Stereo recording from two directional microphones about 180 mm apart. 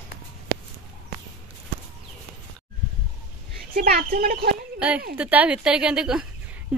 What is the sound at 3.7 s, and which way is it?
Speech, 55° right (ahead or behind).